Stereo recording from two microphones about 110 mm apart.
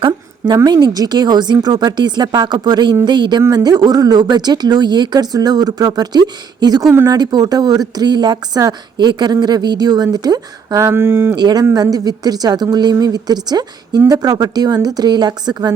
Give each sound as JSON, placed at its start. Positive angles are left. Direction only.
{"t": 0.0, "sound": "a woman's voice", "side_deg": -40}
{"t": 11.3, "sound": "a woman's voice", "side_deg": -40}